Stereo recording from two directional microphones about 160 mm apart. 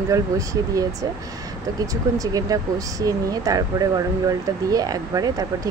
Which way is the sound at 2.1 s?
20° right (ahead or behind).